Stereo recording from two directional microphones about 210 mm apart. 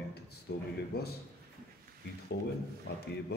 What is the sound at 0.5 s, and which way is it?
Speech, 50° left (ahead or behind).